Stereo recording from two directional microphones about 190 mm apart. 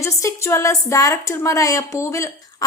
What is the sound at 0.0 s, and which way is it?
A woman's voice, 15° left (ahead or behind).